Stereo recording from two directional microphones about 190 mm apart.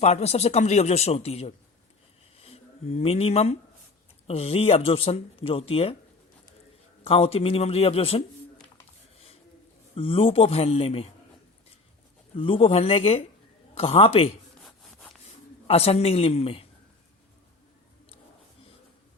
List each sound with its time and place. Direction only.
0.0 s speech: 35° left (ahead or behind)
7.0 s speech: 30° left (ahead or behind)
9.9 s a man's voice: 30° left (ahead or behind)
12.3 s a man's voice: 30° left (ahead or behind)
14.6 s sawing: centre (ahead or behind)
15.6 s speech: 30° left (ahead or behind)